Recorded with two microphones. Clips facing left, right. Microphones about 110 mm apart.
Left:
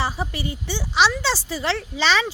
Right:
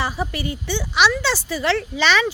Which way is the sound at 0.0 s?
30° left (ahead or behind).